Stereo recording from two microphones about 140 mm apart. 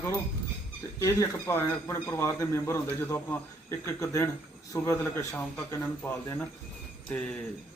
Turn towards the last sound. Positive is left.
turn(degrees=5)  # may be behind; listen again after turning